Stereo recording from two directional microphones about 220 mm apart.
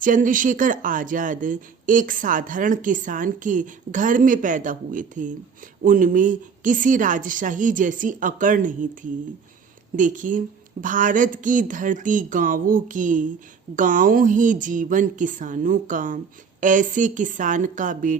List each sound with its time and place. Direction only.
0.0 s speech: 35° right (ahead or behind)
9.9 s speech: 35° right (ahead or behind)